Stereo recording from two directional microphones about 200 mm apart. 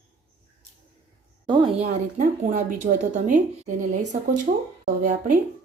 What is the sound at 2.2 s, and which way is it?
A woman's voice, 40° right (ahead or behind).